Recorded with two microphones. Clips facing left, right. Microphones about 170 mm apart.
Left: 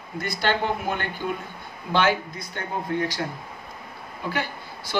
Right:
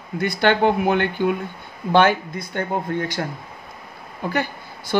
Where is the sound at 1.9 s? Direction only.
55° right (ahead or behind).